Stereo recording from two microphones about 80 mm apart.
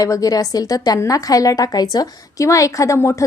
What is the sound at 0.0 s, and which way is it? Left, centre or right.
A woman's voice, left.